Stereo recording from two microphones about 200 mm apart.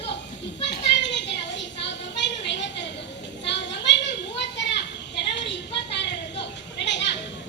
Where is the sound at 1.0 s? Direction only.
60° left (ahead or behind).